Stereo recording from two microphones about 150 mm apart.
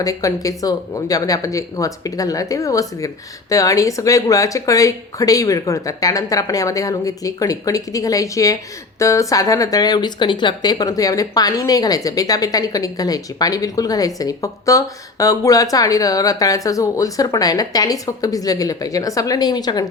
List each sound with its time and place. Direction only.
0.0 s speech: 20° left (ahead or behind)